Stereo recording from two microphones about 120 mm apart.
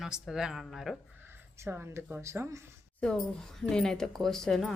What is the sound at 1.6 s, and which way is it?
Speech, 15° right (ahead or behind).